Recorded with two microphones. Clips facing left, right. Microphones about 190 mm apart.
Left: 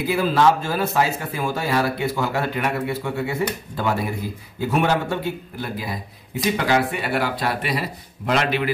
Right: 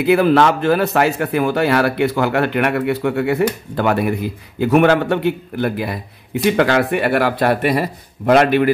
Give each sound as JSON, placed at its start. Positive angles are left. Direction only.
{"t": 0.0, "sound": "speech", "side_deg": -65}